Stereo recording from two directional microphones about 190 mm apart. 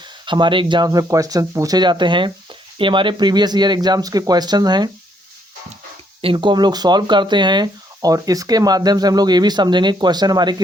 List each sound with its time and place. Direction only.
0.3 s speech: 25° right (ahead or behind)
6.2 s speech: 25° right (ahead or behind)